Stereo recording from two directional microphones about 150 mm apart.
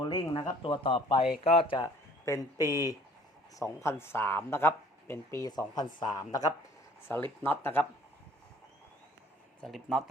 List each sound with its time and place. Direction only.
0.0 s speech: 25° left (ahead or behind)
2.2 s speech: 20° left (ahead or behind)
7.1 s speech: 15° left (ahead or behind)
9.6 s speech: centre (ahead or behind)